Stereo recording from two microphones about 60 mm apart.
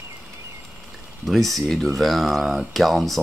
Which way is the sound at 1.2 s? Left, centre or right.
Centre.